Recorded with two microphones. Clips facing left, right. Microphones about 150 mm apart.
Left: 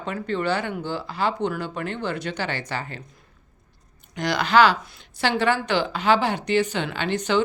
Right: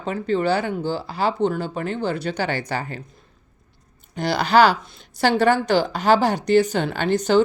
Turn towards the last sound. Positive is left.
turn(degrees=-40)  # may be behind; listen again after turning